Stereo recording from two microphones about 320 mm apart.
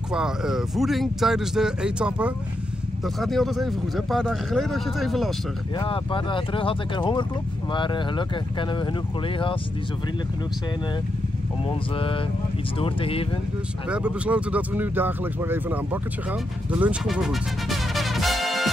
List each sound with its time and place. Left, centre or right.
0.1 s speech: centre
5.8 s speech: centre
11.6 s speech: centre
13.8 s speech: centre